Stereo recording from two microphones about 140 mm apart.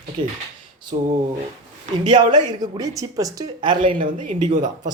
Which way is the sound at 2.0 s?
30° right (ahead or behind).